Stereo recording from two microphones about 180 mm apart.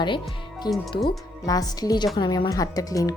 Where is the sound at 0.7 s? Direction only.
25° left (ahead or behind).